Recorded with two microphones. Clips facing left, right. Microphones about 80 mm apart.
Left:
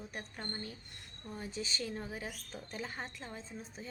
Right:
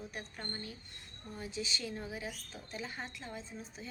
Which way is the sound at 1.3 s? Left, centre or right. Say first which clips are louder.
Even; left.